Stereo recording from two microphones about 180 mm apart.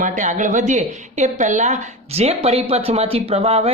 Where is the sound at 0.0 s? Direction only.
45° right (ahead or behind).